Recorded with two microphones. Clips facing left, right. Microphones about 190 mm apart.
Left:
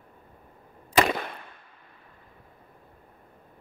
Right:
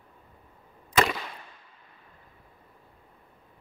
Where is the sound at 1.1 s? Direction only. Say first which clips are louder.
Left 5 dB; 55° left (ahead or behind).